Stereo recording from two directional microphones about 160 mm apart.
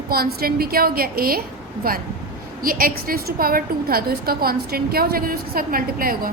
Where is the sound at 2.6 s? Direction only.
65° right (ahead or behind).